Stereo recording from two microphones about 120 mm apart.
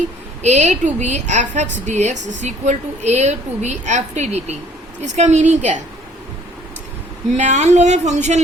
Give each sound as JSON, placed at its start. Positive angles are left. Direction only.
{"t": 0.4, "sound": "a woman's voice", "side_deg": -70}
{"t": 7.3, "sound": "a woman's voice", "side_deg": -80}